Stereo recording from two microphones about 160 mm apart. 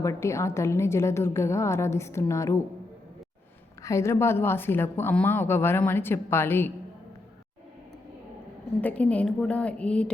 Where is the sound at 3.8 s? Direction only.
20° left (ahead or behind).